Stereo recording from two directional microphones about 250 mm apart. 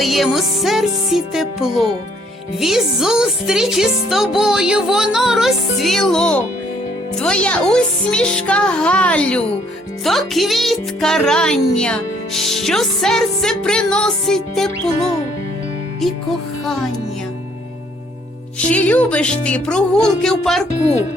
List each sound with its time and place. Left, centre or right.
0.0 s speech: centre
18.7 s speech: centre
20.7 s speech: left